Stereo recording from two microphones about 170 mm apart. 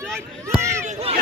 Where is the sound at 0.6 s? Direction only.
15° right (ahead or behind).